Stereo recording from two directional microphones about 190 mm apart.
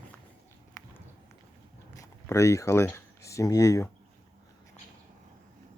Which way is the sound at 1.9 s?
15° left (ahead or behind).